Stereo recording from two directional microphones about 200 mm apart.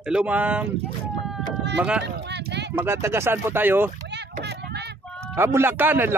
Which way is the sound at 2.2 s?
55° right (ahead or behind).